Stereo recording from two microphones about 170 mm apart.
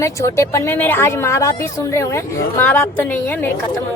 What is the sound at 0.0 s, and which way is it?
A woman's voice, 15° left (ahead or behind).